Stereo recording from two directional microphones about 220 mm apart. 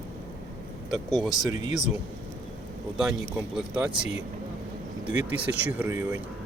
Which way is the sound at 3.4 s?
5° right (ahead or behind).